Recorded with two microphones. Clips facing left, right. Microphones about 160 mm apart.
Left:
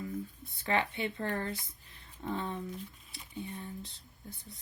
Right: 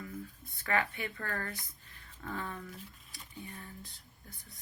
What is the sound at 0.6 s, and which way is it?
Speech, 25° left (ahead or behind).